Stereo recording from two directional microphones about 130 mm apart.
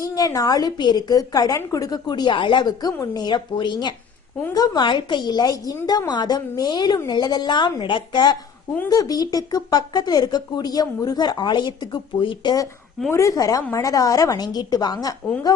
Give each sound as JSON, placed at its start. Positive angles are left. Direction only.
{"t": 0.0, "sound": "a woman's voice", "side_deg": 25}
{"t": 13.1, "sound": "a woman's voice", "side_deg": 20}